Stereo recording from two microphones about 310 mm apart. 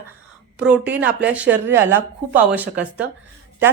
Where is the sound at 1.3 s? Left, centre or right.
Centre.